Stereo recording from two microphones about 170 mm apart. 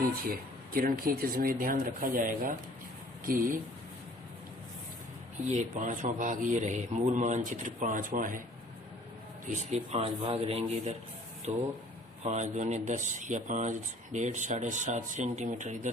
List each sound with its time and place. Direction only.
0.2 s speech: 60° right (ahead or behind)
5.5 s speech: 50° right (ahead or behind)
9.5 s a man's voice: 45° right (ahead or behind)